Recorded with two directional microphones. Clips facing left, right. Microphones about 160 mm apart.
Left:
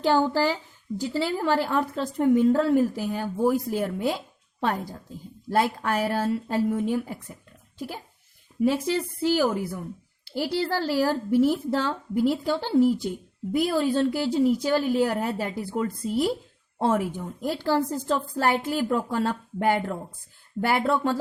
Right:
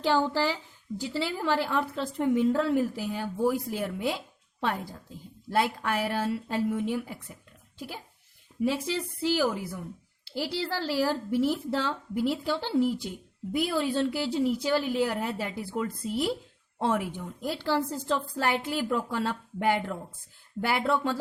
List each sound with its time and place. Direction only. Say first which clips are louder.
0.0 s speech: left 4 dB; 50° left (ahead or behind)